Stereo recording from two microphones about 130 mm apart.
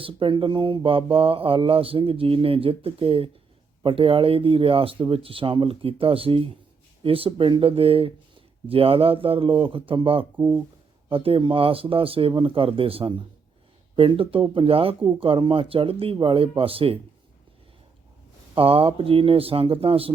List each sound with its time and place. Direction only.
0.0 s mantra: 40° right (ahead or behind)
7.0 s speech: 45° right (ahead or behind)
8.7 s mantra: 45° right (ahead or behind)
18.5 s mantra: 45° right (ahead or behind)